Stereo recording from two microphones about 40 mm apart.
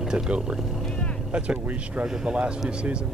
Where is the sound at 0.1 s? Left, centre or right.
Right.